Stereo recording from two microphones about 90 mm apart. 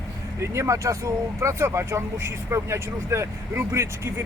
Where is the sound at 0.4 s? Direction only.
30° right (ahead or behind).